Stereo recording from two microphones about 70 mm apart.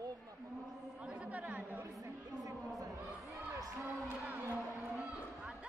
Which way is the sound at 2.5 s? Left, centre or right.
Right.